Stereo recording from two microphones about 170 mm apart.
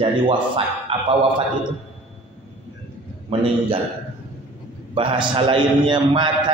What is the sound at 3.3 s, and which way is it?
Speech, 35° right (ahead or behind).